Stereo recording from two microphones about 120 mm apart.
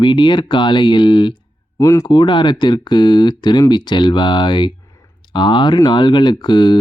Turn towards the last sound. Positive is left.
turn(degrees=40)  # may be behind; listen again after turning